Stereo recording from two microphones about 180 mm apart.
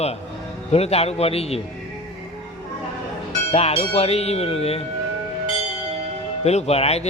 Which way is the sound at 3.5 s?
35° left (ahead or behind).